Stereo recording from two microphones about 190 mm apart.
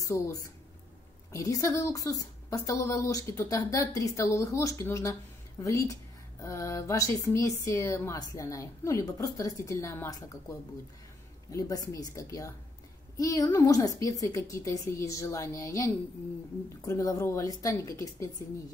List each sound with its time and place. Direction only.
0.0 s a woman's voice: 20° left (ahead or behind)
11.5 s a woman's voice: 20° left (ahead or behind)